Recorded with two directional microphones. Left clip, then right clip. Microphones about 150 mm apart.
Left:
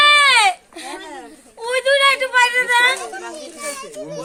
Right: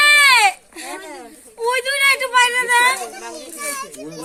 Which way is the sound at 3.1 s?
10° left (ahead or behind).